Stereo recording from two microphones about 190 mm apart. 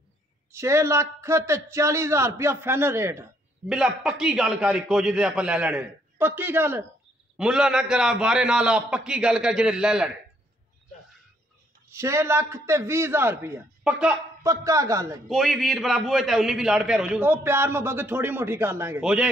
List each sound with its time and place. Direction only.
0.5 s a man's voice: 15° right (ahead or behind)
11.9 s a man's voice: 15° right (ahead or behind)
14.4 s a man's voice: 15° right (ahead or behind)
15.2 s a man's voice: centre (ahead or behind)